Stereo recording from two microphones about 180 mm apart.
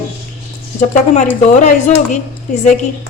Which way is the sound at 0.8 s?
40° left (ahead or behind).